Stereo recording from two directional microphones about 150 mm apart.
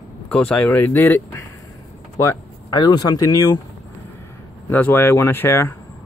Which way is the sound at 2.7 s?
30° left (ahead or behind).